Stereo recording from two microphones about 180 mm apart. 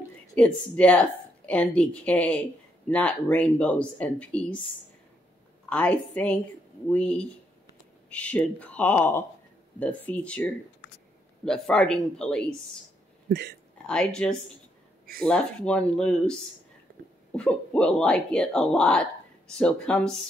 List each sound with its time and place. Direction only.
0.4 s a woman's voice: 5° left (ahead or behind)
5.7 s a woman's voice: 10° left (ahead or behind)
13.3 s speech: 65° right (ahead or behind)
13.8 s speech: 5° left (ahead or behind)
17.4 s speech: 5° left (ahead or behind)